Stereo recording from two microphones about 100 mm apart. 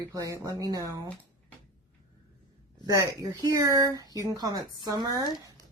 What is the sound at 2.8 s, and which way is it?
A woman's voice, 35° right (ahead or behind).